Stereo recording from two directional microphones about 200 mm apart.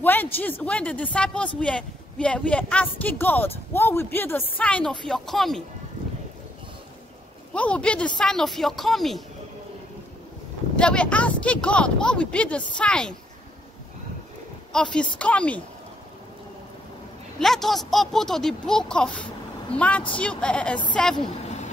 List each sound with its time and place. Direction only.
0.0 s speech: 10° left (ahead or behind)
7.5 s speech: 5° left (ahead or behind)
10.8 s speech: 5° left (ahead or behind)
14.7 s speech: 5° left (ahead or behind)
17.4 s speech: centre (ahead or behind)
21.2 s vehicle: 35° left (ahead or behind)